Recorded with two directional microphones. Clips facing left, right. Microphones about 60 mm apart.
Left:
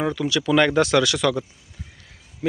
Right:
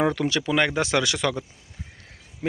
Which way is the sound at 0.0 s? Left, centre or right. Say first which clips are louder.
Right 1 dB; right.